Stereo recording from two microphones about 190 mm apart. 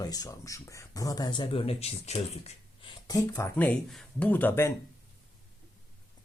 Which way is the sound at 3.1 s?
20° left (ahead or behind).